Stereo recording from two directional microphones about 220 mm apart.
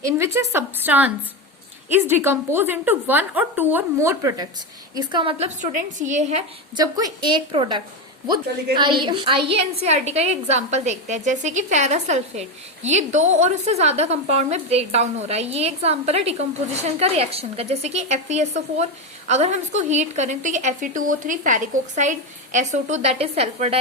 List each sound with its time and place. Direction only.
0.5 s a woman's voice: 10° right (ahead or behind); by 6.4 s 30° right (ahead or behind)
6.7 s a woman's voice: 15° right (ahead or behind)
8.8 s a woman's voice: 20° right (ahead or behind)